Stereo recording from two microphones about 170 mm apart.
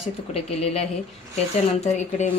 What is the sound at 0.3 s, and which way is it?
Speech, 35° left (ahead or behind).